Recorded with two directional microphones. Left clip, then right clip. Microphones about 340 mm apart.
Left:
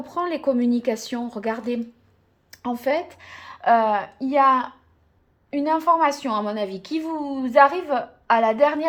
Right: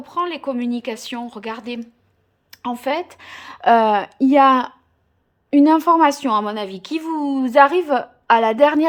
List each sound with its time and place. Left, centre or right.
0.0 s a woman's voice: centre